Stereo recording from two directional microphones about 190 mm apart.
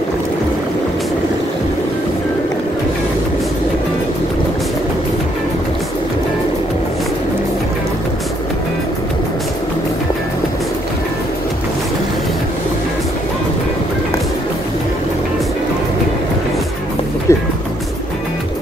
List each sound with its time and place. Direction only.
17.3 s music: 15° left (ahead or behind)